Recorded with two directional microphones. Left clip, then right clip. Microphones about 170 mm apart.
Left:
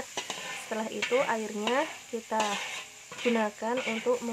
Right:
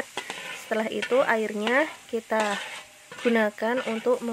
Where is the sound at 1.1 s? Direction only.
30° right (ahead or behind).